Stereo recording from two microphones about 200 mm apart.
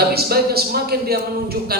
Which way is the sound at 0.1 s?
50° right (ahead or behind).